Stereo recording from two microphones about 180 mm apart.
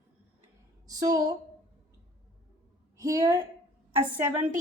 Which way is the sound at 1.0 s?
20° right (ahead or behind).